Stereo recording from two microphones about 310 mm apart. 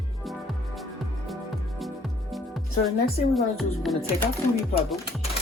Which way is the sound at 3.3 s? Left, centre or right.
Centre.